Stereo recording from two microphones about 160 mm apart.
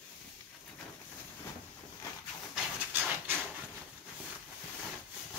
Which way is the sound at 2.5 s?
10° right (ahead or behind).